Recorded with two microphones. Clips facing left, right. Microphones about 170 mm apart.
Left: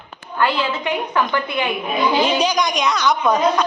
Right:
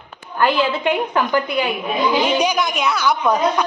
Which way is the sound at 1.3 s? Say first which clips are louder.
Right 3 dB; 40° right (ahead or behind).